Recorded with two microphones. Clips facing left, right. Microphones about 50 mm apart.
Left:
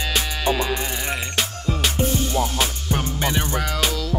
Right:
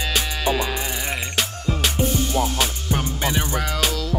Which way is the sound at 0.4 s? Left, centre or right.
Centre.